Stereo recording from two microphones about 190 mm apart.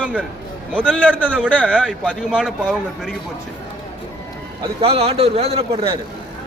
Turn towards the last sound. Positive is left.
turn(degrees=-30)  # may be behind; listen again after turning